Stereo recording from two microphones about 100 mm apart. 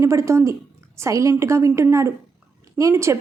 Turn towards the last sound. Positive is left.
turn(degrees=-30)  # may be behind; listen again after turning